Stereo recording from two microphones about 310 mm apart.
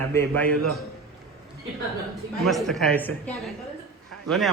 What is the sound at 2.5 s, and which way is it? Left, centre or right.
A man's voice, centre.